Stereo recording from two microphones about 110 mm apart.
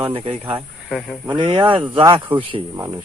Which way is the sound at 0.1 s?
60° right (ahead or behind).